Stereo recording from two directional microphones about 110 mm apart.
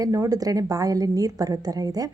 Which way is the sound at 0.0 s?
30° right (ahead or behind).